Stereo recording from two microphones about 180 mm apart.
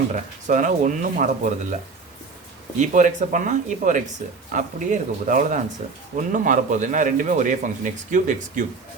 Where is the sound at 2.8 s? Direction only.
45° right (ahead or behind).